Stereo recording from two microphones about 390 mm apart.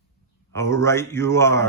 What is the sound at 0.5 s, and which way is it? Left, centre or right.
A woman's voice, centre.